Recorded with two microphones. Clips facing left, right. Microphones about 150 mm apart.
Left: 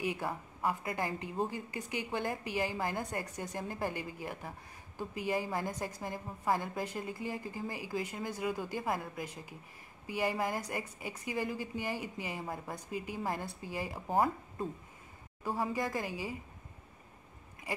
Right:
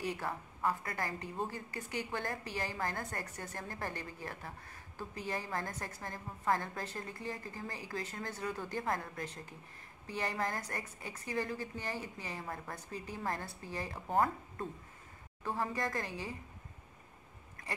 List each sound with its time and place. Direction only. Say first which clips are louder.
0.0 s a woman's voice: left 2 dB; 15° left (ahead or behind)